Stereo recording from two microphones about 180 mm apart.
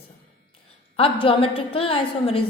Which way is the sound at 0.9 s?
30° left (ahead or behind).